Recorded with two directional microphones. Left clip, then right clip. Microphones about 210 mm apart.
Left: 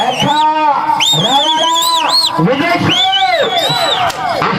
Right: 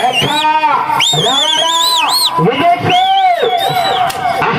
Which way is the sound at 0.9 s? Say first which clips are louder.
Even; 35° right (ahead or behind).